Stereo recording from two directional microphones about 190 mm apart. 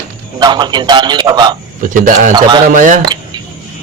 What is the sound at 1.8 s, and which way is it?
Speech, 45° right (ahead or behind).